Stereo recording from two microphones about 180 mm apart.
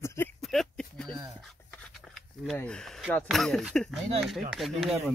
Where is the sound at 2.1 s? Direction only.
5° left (ahead or behind).